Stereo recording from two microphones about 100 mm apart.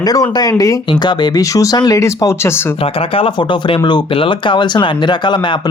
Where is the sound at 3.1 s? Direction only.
60° left (ahead or behind).